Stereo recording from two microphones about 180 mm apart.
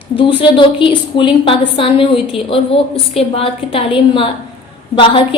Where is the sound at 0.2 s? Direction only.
30° left (ahead or behind).